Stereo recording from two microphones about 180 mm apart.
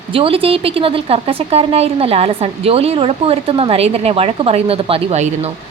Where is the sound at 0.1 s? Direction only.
30° right (ahead or behind).